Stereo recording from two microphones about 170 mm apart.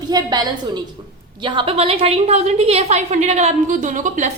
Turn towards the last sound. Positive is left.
turn(degrees=-45)  # may be behind; listen again after turning